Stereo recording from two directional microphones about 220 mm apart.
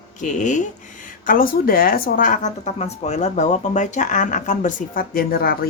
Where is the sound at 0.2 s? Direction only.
35° left (ahead or behind).